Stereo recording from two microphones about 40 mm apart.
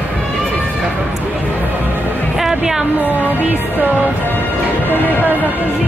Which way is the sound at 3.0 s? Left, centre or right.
Right.